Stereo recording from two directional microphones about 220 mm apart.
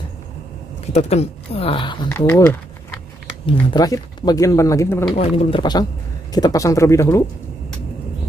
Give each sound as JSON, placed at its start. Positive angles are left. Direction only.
{"t": 0.9, "sound": "speech", "side_deg": 30}
{"t": 2.0, "sound": "speech", "side_deg": 10}
{"t": 5.1, "sound": "speech", "side_deg": 25}